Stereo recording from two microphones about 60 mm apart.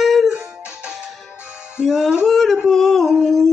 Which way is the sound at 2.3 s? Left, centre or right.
Centre.